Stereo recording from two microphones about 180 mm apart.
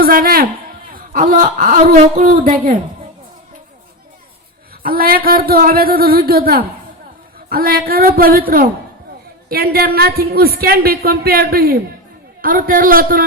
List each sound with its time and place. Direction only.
0.0 s a sound: 55° right (ahead or behind)
1.3 s speech: 50° right (ahead or behind)
4.8 s a woman's voice: 55° right (ahead or behind)